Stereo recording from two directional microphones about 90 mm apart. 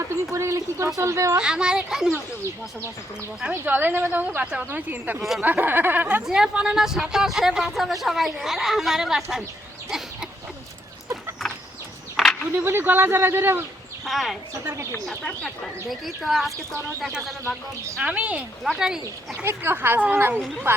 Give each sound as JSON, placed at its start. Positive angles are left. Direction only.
{"t": 0.3, "sound": "speech", "side_deg": -35}
{"t": 1.4, "sound": "speech", "side_deg": -10}
{"t": 3.7, "sound": "a woman's voice", "side_deg": -20}
{"t": 6.2, "sound": "speech", "side_deg": -5}
{"t": 11.4, "sound": "chicken", "side_deg": 5}
{"t": 12.1, "sound": "a sound", "side_deg": 5}
{"t": 12.5, "sound": "a woman's voice", "side_deg": -25}
{"t": 14.0, "sound": "speech", "side_deg": 0}
{"t": 14.6, "sound": "a woman's voice", "side_deg": -25}
{"t": 15.0, "sound": "speech", "side_deg": 15}
{"t": 18.0, "sound": "speech", "side_deg": -15}
{"t": 18.3, "sound": "speech", "side_deg": 0}
{"t": 19.4, "sound": "a woman's voice", "side_deg": -25}